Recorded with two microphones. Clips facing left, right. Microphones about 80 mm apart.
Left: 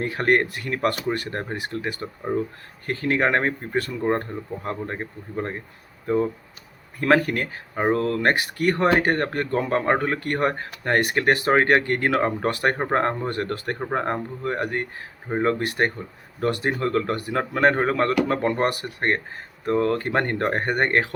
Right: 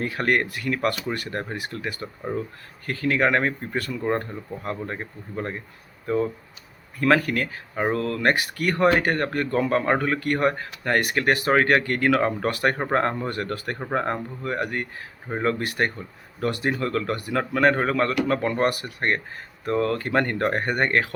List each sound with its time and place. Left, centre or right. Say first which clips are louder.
0.0 s speech: left 2 dB; left
2.3 s speech: left 4 dB; centre
2.8 s speech: even; left
7.0 s speech: left 1 dB; left